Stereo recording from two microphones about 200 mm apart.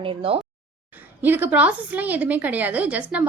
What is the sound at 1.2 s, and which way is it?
A woman's voice, 10° right (ahead or behind).